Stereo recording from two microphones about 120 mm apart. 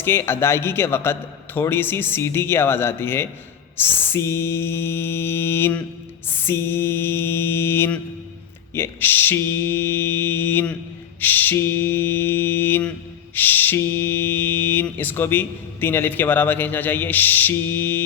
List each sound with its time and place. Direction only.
0.0 s a man's voice: 20° left (ahead or behind)